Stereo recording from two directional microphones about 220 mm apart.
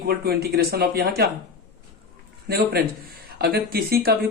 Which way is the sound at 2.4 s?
45° right (ahead or behind).